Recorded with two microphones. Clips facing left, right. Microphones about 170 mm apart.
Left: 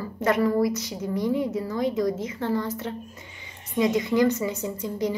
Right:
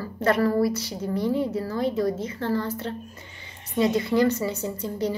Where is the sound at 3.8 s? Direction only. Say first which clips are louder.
Even; 15° left (ahead or behind).